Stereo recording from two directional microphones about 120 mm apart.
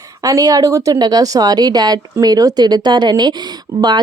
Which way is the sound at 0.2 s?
30° right (ahead or behind).